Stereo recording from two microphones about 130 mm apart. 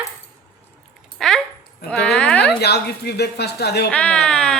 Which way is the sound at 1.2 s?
5° left (ahead or behind).